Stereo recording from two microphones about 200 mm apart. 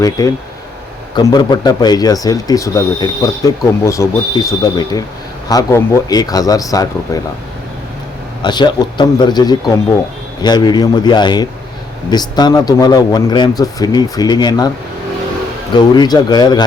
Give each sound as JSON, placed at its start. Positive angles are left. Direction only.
{"t": 0.2, "sound": "speech", "side_deg": 15}
{"t": 8.4, "sound": "speech", "side_deg": 20}
{"t": 15.7, "sound": "speech", "side_deg": 20}